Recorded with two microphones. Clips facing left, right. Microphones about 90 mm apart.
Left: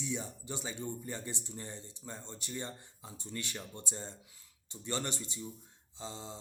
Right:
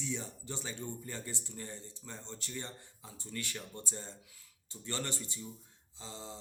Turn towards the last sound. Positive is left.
turn(degrees=25)  # may be behind; listen again after turning